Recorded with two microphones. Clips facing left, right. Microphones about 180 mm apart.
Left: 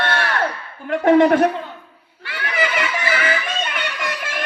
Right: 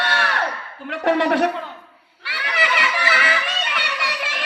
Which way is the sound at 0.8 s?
50° left (ahead or behind).